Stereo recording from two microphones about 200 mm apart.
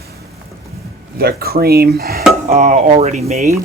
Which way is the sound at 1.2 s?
50° right (ahead or behind).